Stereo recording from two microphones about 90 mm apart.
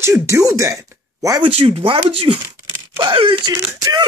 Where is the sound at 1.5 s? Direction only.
90° right; by 3.5 s 65° right (ahead or behind).